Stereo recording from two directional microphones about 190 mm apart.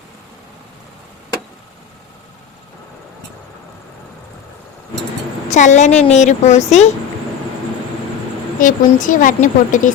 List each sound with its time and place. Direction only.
5.5 s speech: 40° left (ahead or behind)
8.5 s a woman's voice: 45° left (ahead or behind)